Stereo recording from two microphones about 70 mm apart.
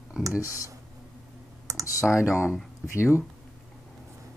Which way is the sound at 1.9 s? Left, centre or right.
Left.